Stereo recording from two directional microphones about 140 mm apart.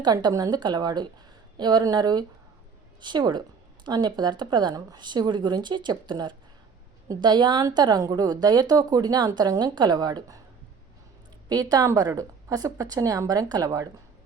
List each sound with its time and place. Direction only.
0.0 s a woman's voice: 30° right (ahead or behind)
11.4 s a woman's voice: 25° right (ahead or behind)